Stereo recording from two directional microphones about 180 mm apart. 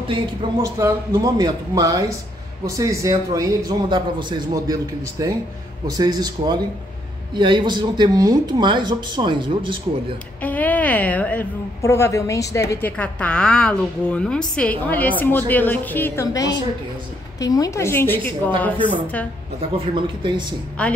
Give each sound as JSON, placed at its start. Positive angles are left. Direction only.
{"t": 0.1, "sound": "speech", "side_deg": -30}
{"t": 0.7, "sound": "speech", "side_deg": -20}
{"t": 10.4, "sound": "a woman's voice", "side_deg": 10}
{"t": 19.9, "sound": "speech", "side_deg": -25}
{"t": 20.8, "sound": "a woman's voice", "side_deg": 5}